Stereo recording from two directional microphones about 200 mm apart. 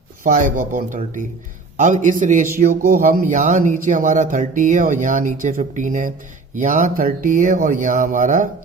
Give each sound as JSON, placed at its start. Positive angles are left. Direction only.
{"t": 0.3, "sound": "speech", "side_deg": -40}